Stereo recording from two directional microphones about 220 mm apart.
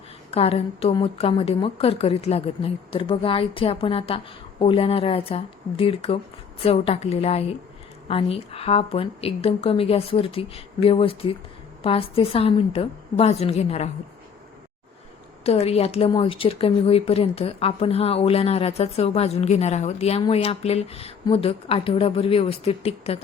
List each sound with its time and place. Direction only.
0.3 s a woman's voice: 25° left (ahead or behind)
15.4 s a woman's voice: 30° left (ahead or behind)